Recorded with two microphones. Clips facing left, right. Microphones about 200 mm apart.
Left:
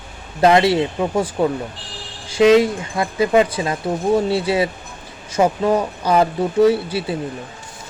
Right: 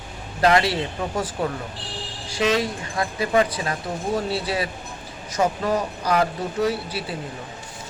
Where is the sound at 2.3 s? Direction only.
25° left (ahead or behind).